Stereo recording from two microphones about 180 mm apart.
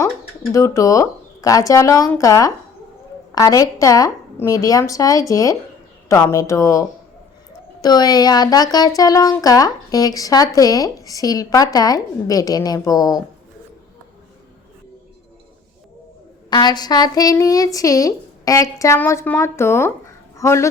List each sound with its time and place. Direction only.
0.5 s speech: 20° left (ahead or behind)
16.5 s speech: 25° left (ahead or behind)